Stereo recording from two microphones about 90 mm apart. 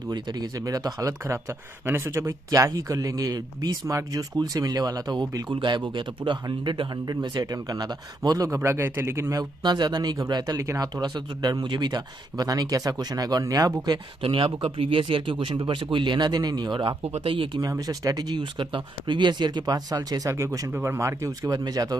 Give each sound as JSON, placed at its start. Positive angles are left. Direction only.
{"t": 0.1, "sound": "speech", "side_deg": -45}
{"t": 8.5, "sound": "speech", "side_deg": -30}
{"t": 9.4, "sound": "speech", "side_deg": -55}
{"t": 11.0, "sound": "speech", "side_deg": -50}
{"t": 14.2, "sound": "speech", "side_deg": -90}
{"t": 17.6, "sound": "speech", "side_deg": -45}
{"t": 20.2, "sound": "speech", "side_deg": -30}